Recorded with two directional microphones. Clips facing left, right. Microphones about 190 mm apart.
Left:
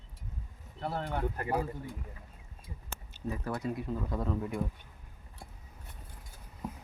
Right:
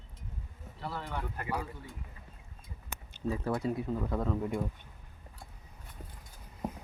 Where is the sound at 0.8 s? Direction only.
55° left (ahead or behind).